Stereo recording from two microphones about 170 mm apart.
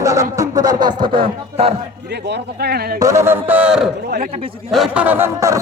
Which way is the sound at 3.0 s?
15° right (ahead or behind).